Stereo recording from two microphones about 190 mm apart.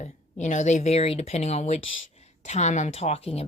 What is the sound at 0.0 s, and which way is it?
Speech, 35° left (ahead or behind).